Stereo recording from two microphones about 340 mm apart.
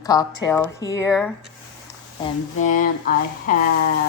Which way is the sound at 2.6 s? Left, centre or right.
Left.